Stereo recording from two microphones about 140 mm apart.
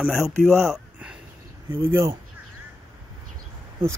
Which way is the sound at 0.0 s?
5° right (ahead or behind).